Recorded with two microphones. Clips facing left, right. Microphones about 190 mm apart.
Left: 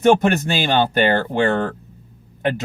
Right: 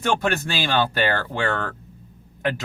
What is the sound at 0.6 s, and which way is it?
Speech, 20° left (ahead or behind).